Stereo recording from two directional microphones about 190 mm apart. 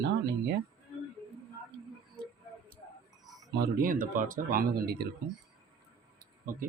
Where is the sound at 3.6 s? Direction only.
50° right (ahead or behind).